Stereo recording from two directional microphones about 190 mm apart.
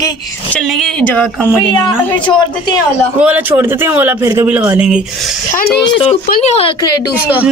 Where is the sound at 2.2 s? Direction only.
25° left (ahead or behind).